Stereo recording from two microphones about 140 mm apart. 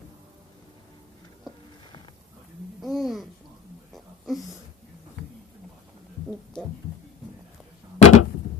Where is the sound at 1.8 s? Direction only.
35° left (ahead or behind).